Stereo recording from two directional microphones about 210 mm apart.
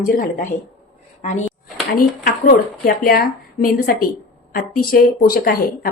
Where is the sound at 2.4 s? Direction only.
45° left (ahead or behind).